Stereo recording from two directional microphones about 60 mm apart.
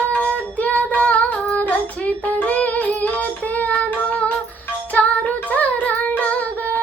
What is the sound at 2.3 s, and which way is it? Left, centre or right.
Music, left.